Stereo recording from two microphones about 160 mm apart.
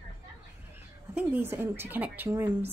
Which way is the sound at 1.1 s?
10° right (ahead or behind).